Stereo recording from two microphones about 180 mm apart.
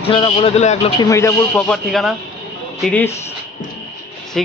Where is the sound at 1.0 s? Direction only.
15° left (ahead or behind).